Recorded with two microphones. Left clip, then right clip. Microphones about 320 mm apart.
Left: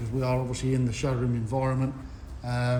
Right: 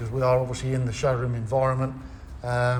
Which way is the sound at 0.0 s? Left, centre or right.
Centre.